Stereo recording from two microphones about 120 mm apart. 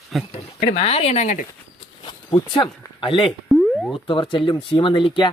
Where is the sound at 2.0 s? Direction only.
40° left (ahead or behind).